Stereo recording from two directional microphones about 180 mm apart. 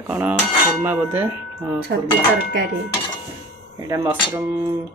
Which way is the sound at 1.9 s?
70° right (ahead or behind).